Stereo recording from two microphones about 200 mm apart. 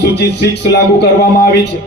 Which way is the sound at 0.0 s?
55° left (ahead or behind).